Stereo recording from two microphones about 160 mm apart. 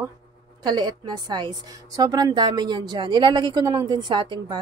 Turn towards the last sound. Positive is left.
turn(degrees=-25)  # may be behind; listen again after turning